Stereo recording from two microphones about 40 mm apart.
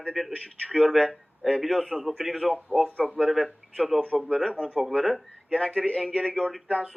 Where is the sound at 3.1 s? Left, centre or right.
Centre.